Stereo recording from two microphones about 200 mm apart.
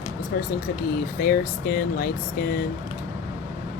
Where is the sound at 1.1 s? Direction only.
45° left (ahead or behind).